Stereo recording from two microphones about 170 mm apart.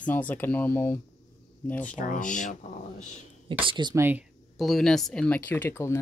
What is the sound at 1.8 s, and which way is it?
Speech, 50° left (ahead or behind).